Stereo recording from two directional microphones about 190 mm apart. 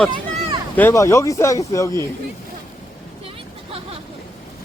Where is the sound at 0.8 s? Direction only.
15° left (ahead or behind).